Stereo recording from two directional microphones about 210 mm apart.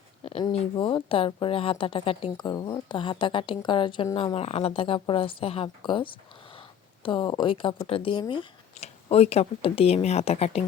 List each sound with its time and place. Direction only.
0.2 s speech: 25° left (ahead or behind)